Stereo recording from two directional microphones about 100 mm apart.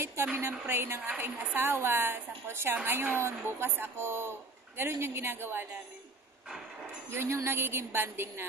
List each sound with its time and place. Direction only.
0.0 s a woman's voice: 20° right (ahead or behind)
7.1 s a woman's voice: 25° right (ahead or behind)